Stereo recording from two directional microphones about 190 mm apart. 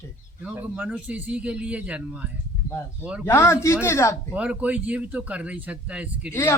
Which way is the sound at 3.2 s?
10° left (ahead or behind).